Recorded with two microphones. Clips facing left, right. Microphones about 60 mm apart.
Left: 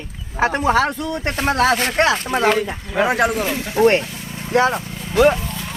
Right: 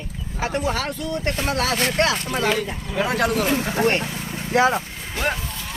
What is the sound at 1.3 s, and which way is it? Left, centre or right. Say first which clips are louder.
Speech: left 10 dB; left.